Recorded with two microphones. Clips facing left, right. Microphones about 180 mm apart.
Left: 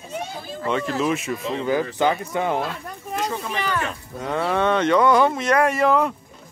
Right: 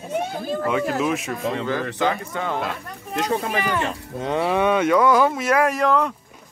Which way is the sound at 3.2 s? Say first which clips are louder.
Right 4 dB; 60° right (ahead or behind).